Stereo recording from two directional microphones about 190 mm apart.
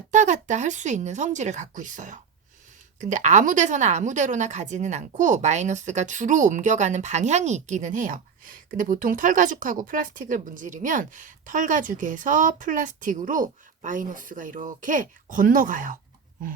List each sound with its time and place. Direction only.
0.1 s a woman's voice: 40° right (ahead or behind)